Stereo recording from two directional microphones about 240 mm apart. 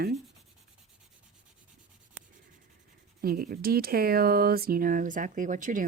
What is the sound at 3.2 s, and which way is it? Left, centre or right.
Speech, right.